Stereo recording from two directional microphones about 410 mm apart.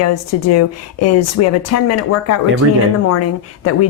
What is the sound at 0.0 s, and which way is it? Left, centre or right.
Speech, left.